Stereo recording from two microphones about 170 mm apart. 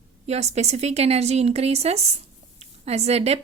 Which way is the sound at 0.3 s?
40° right (ahead or behind).